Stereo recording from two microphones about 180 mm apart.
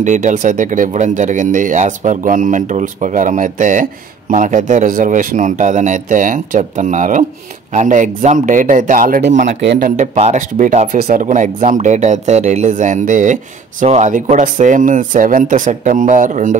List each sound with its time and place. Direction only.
0.0 s speech: 45° right (ahead or behind)